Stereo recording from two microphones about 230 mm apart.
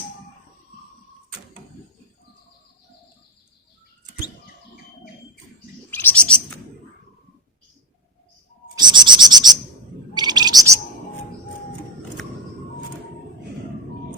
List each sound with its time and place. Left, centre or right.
5.9 s bird: centre
8.7 s bird: centre